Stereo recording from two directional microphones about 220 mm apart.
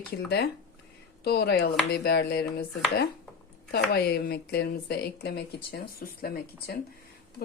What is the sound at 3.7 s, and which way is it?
A woman's voice, 45° left (ahead or behind).